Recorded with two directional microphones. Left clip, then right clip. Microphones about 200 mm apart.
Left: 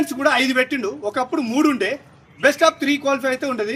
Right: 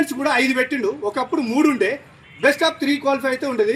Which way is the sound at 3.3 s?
Centre (ahead or behind).